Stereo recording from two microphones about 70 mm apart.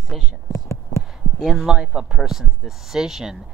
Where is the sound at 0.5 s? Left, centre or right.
Left.